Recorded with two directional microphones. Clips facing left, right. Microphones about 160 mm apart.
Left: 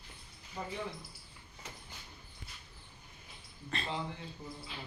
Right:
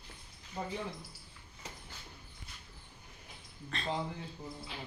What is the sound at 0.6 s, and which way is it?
Speech, 30° right (ahead or behind).